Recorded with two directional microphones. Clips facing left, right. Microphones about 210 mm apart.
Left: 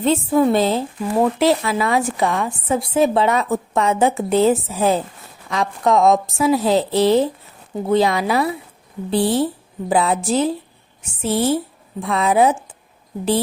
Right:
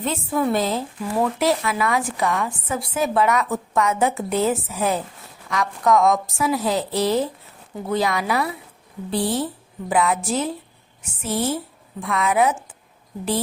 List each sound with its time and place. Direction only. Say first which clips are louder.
0.0 s a woman's voice: left 7 dB; 30° left (ahead or behind)